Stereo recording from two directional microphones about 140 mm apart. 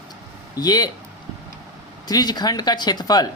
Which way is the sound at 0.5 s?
30° left (ahead or behind).